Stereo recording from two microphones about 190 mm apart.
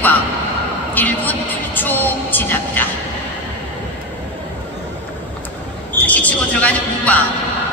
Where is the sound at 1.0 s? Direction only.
10° left (ahead or behind).